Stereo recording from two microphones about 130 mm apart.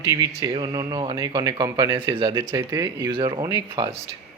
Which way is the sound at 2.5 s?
25° right (ahead or behind).